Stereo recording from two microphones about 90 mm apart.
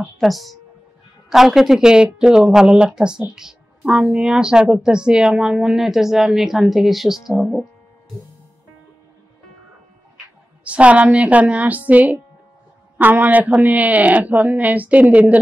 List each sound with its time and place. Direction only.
0.0 s a sound: centre (ahead or behind)
1.3 s speech: 5° right (ahead or behind)
7.3 s speech: 10° left (ahead or behind)
10.6 s speech: 15° right (ahead or behind)